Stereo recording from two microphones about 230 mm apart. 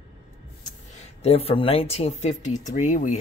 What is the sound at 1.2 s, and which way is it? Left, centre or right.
Speech, left.